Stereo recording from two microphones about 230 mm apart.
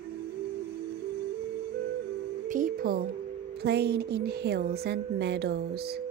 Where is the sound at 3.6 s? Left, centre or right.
Right.